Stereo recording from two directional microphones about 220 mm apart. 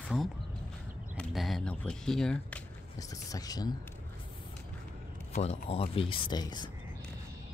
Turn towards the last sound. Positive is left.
turn(degrees=20)  # may be behind; listen again after turning